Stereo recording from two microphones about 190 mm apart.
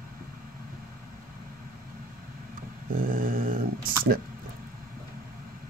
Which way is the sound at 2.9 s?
45° right (ahead or behind).